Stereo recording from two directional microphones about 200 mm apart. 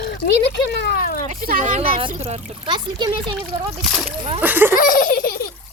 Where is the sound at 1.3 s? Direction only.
45° right (ahead or behind).